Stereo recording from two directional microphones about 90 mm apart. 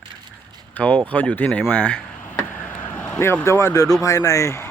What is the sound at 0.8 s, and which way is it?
Speech, 15° left (ahead or behind).